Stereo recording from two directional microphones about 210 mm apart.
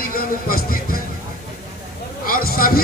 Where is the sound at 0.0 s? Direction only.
45° left (ahead or behind).